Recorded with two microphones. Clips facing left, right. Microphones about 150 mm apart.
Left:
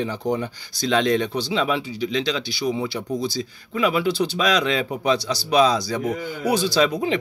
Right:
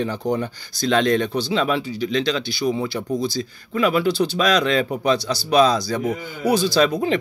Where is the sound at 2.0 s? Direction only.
50° right (ahead or behind).